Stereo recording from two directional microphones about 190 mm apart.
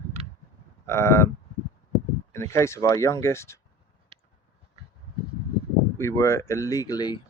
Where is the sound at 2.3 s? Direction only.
15° left (ahead or behind).